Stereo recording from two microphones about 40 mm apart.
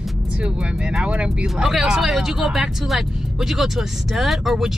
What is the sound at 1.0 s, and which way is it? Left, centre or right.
Speech, right.